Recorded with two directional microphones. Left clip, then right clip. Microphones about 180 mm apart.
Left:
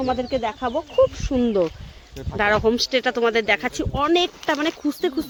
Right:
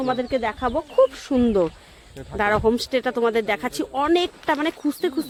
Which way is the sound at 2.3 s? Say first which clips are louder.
Left 1 dB; centre (ahead or behind).